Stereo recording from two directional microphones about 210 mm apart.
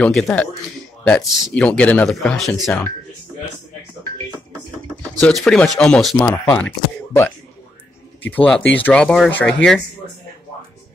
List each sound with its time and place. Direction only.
0.0 s speech: 5° left (ahead or behind)
5.2 s speech: centre (ahead or behind)
8.5 s speech: 5° left (ahead or behind)